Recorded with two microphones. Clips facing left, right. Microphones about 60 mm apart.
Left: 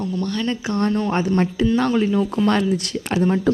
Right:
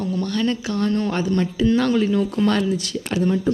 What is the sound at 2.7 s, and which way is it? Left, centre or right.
Speech, left.